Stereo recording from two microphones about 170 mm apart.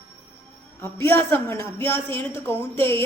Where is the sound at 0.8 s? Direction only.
15° left (ahead or behind).